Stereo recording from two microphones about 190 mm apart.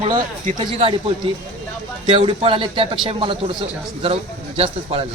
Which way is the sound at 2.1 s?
30° right (ahead or behind).